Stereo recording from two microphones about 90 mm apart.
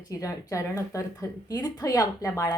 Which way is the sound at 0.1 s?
40° left (ahead or behind).